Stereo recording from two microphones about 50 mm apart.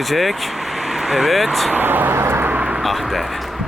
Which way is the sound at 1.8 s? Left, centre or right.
Right.